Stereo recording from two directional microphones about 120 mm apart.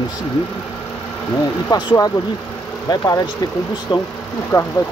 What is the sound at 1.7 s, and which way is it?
Speech, 35° left (ahead or behind).